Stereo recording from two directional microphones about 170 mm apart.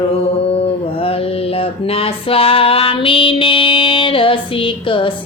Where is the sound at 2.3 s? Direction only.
35° left (ahead or behind).